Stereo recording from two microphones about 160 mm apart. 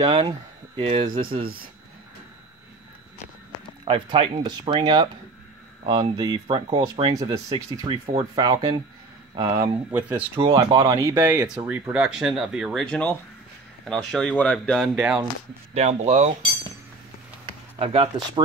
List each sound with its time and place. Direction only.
0.0 s speech: 35° right (ahead or behind)
3.8 s speech: 35° right (ahead or behind)
9.9 s speech: 10° right (ahead or behind)
10.5 s speech: 25° right (ahead or behind); by 14.9 s 5° left (ahead or behind)
15.0 s speech: 5° right (ahead or behind)
15.7 s speech: 40° right (ahead or behind)
17.7 s speech: 40° right (ahead or behind)